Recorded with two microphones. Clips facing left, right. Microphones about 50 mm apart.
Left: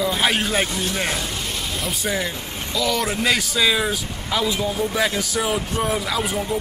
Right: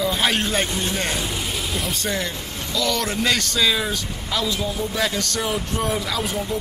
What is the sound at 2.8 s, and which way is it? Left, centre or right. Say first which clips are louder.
Speech: left 1 dB; centre.